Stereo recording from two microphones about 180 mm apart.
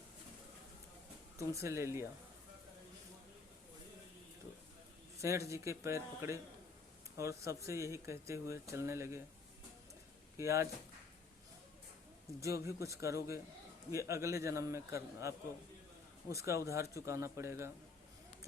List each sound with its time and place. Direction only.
1.4 s speech: 15° right (ahead or behind)
5.2 s speech: 15° right (ahead or behind)
10.3 s speech: 15° right (ahead or behind)
12.6 s speech: 15° right (ahead or behind)